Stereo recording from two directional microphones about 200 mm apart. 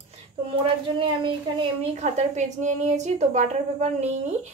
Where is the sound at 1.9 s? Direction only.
35° right (ahead or behind).